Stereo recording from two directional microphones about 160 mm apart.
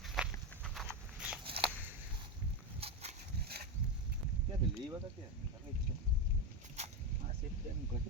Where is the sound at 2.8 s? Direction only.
40° right (ahead or behind).